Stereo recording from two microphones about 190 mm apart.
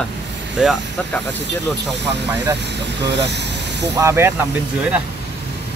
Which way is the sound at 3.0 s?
65° right (ahead or behind).